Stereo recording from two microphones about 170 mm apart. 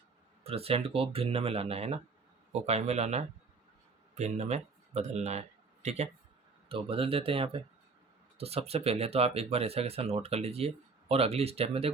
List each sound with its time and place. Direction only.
0.4 s speech: 35° right (ahead or behind)